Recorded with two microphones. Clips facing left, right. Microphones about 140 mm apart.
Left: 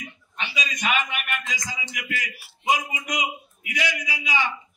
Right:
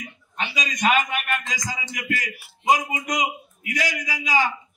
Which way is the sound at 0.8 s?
40° right (ahead or behind).